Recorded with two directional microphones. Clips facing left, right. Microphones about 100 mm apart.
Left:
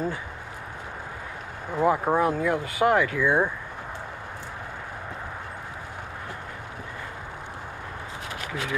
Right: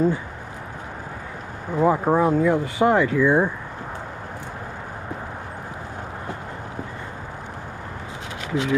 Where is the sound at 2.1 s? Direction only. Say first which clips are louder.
Right 5 dB; 20° right (ahead or behind).